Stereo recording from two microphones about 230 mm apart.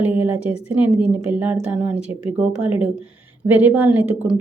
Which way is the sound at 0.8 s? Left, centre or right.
Centre.